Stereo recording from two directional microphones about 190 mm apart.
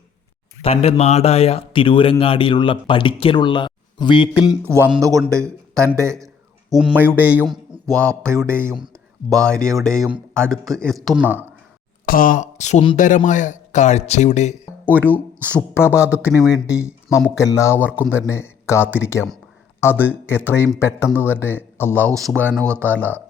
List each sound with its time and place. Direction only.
0.6 s speech: 30° left (ahead or behind)
4.4 s speech: 10° right (ahead or behind)
7.9 s speech: 5° left (ahead or behind)
8.3 s speech: 15° right (ahead or behind)
9.3 s speech: 5° left (ahead or behind)
12.0 s speech: 50° left (ahead or behind)
15.4 s speech: 10° right (ahead or behind)
15.7 s speech: 15° left (ahead or behind)
16.1 s speech: 5° right (ahead or behind)
16.6 s speech: 15° left (ahead or behind)
22.6 s speech: 15° right (ahead or behind)
22.9 s speech: 10° left (ahead or behind)